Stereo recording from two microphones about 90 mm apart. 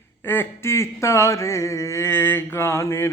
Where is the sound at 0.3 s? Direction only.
25° left (ahead or behind).